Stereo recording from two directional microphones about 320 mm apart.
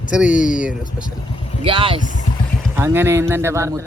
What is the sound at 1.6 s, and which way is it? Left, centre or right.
Speech, centre.